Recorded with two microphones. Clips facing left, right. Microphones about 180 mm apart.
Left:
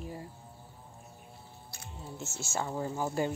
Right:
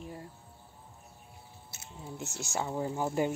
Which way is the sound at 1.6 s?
20° right (ahead or behind).